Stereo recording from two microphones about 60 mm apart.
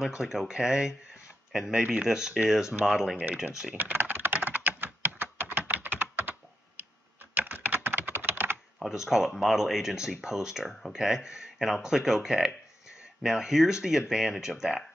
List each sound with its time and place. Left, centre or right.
0.1 s speech: centre
3.7 s typing: right
7.3 s computer keyboard: right
8.7 s speech: centre
11.5 s a sound: centre
11.8 s speech: centre